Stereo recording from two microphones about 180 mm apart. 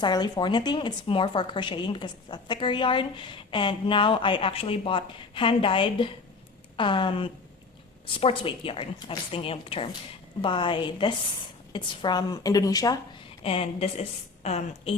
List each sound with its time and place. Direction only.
0.0 s a woman's voice: 25° left (ahead or behind)
13.4 s a woman's voice: 35° left (ahead or behind)